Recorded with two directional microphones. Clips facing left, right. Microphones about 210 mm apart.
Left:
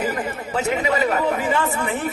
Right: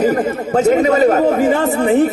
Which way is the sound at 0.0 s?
45° right (ahead or behind).